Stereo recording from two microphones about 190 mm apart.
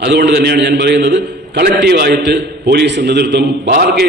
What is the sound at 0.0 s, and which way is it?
A man's voice, 60° right (ahead or behind).